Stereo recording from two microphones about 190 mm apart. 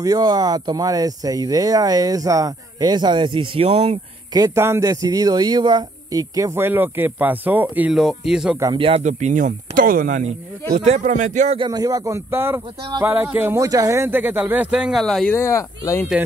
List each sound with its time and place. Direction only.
0.0 s speech: 20° right (ahead or behind)
4.3 s speech: 15° right (ahead or behind)
8.7 s speech: 30° right (ahead or behind); by 15.3 s centre (ahead or behind)
15.3 s speech: 15° left (ahead or behind)